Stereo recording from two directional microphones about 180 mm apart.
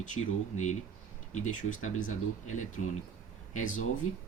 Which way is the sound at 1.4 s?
45° left (ahead or behind).